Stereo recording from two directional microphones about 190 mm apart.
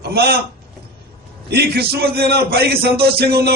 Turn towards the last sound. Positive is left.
turn(degrees=-55)  # may be behind; listen again after turning